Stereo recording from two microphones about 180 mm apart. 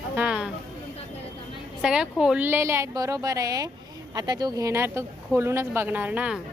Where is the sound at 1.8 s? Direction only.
5° right (ahead or behind).